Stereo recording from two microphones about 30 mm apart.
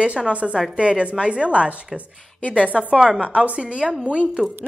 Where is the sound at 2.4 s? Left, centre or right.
Left.